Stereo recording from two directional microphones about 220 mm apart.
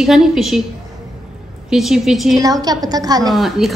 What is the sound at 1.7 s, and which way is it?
Speech, centre (ahead or behind).